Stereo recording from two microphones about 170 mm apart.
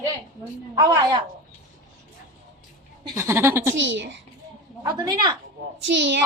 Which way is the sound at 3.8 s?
90° right.